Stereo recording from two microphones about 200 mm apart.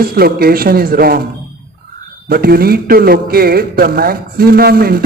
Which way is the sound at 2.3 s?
50° right (ahead or behind).